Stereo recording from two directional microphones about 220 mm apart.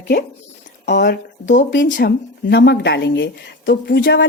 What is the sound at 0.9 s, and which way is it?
A woman's voice, 50° left (ahead or behind).